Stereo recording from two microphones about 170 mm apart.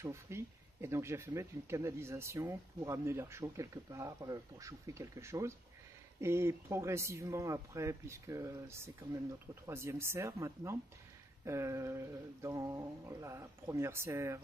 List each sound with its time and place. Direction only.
0.0 s speech: 15° right (ahead or behind)